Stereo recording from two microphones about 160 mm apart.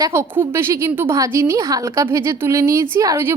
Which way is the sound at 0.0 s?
15° right (ahead or behind).